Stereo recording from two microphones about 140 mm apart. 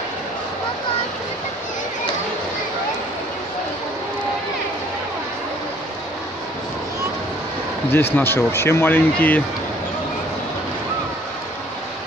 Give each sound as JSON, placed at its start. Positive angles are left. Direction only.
{"t": 7.9, "sound": "speech", "side_deg": 15}